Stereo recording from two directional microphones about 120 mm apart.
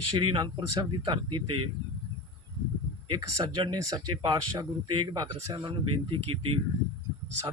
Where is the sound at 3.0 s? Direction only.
40° right (ahead or behind).